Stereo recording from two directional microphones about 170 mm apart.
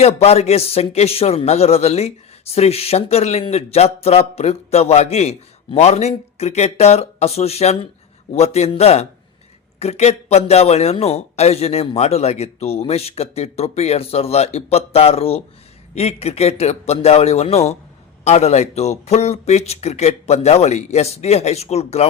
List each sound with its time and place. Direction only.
0.0 s a man's voice: 40° left (ahead or behind)